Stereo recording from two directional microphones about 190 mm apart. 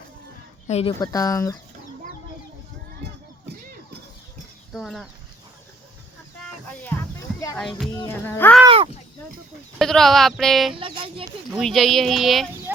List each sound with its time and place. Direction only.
0.7 s speech: 30° left (ahead or behind)
0.9 s speech: 20° left (ahead or behind)
4.7 s speech: centre (ahead or behind)
7.9 s speech: 10° left (ahead or behind)
8.6 s speech: 30° right (ahead or behind)
9.7 s speech: centre (ahead or behind)
10.8 s speech: 25° right (ahead or behind)
11.5 s speech: centre (ahead or behind)